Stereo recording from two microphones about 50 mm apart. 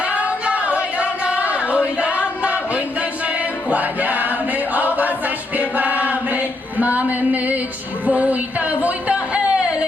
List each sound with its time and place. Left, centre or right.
0.0 s singing: right
0.9 s a sound: right
2.0 s choir: right
8.0 s music: right